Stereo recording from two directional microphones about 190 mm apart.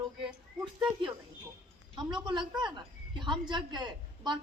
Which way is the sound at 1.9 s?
25° right (ahead or behind).